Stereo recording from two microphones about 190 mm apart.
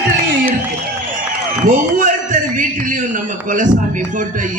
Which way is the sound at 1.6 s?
45° right (ahead or behind).